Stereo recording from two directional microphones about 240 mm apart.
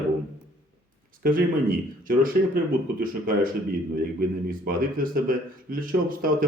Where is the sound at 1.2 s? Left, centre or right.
Right.